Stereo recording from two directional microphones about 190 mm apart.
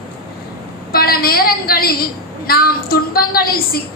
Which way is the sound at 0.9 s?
50° left (ahead or behind).